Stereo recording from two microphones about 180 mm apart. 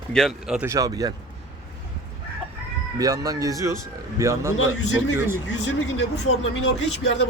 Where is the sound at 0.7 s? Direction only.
20° right (ahead or behind).